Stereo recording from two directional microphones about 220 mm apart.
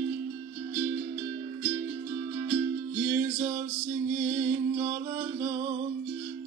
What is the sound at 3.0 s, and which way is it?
Music, 15° right (ahead or behind).